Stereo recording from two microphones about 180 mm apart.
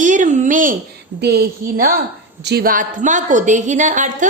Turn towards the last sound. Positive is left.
turn(degrees=-45)  # may be behind; listen again after turning